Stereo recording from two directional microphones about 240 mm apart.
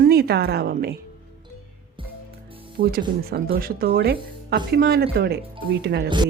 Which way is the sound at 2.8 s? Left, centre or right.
Right.